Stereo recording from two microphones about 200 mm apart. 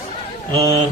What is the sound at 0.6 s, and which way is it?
Speech, 20° right (ahead or behind).